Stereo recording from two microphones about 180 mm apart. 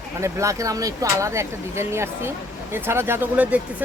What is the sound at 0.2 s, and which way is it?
Speech, 15° right (ahead or behind).